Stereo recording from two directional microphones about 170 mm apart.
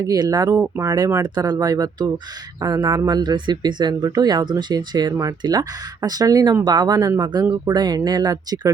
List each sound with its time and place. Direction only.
0.0 s speech: 20° right (ahead or behind)